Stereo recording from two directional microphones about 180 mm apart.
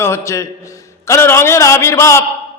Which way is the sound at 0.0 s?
15° left (ahead or behind).